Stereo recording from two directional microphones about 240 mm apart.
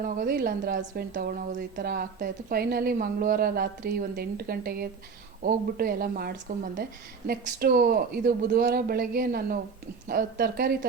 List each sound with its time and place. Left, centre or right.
0.0 s a woman's voice: right